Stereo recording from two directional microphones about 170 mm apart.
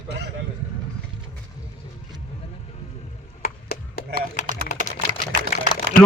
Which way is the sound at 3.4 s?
60° left (ahead or behind).